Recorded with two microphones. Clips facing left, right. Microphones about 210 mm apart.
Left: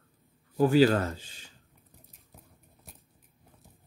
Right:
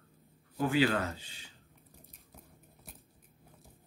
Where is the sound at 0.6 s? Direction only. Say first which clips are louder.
Left 7 dB; 40° left (ahead or behind).